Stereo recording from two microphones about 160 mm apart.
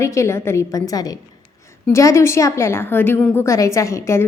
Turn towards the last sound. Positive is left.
turn(degrees=20)  # may be behind; listen again after turning